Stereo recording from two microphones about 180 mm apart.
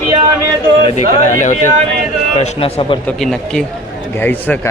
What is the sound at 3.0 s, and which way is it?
A man's voice, centre (ahead or behind).